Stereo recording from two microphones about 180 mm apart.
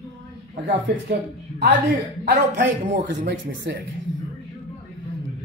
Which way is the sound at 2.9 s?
70° right (ahead or behind).